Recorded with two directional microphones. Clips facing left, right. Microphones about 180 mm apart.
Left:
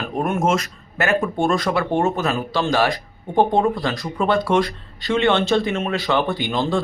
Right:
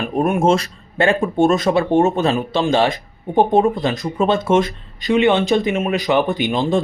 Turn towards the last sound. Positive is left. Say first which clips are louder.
# right 3 dB
turn(degrees=-20)  # may be behind; listen again after turning